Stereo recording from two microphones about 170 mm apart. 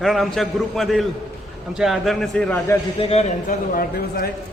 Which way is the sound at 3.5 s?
60° left (ahead or behind).